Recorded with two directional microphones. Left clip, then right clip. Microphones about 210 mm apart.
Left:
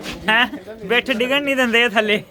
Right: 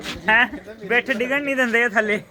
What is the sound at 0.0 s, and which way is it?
A man's voice, 10° left (ahead or behind).